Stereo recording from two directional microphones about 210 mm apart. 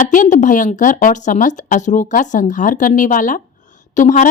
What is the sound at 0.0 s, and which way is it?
Speech, 40° left (ahead or behind).